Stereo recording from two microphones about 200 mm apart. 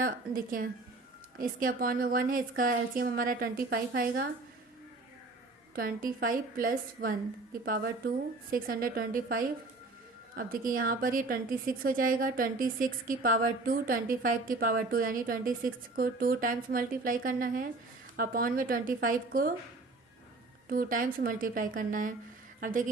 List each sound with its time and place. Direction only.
0.0 s a woman's voice: 45° right (ahead or behind)
5.7 s a woman's voice: 45° right (ahead or behind)
20.7 s a woman's voice: 45° right (ahead or behind)